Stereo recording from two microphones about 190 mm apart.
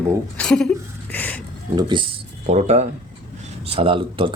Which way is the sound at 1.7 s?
25° right (ahead or behind).